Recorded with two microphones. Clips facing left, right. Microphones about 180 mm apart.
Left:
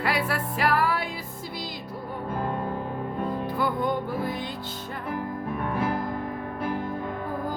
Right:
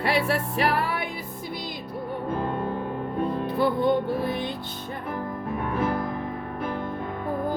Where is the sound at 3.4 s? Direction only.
25° right (ahead or behind).